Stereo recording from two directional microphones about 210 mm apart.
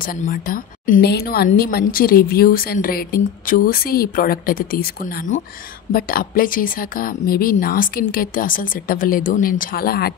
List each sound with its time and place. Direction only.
0.0 s a woman's voice: 40° left (ahead or behind)